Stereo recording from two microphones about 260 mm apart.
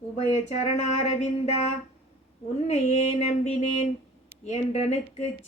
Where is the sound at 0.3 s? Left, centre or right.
Left.